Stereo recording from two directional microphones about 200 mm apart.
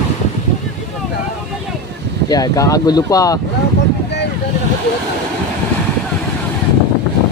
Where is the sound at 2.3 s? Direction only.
15° left (ahead or behind).